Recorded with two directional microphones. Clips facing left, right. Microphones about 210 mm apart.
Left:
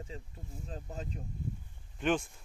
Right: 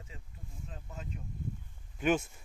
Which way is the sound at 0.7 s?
35° left (ahead or behind).